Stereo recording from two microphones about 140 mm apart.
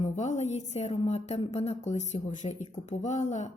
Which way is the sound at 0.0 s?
55° left (ahead or behind).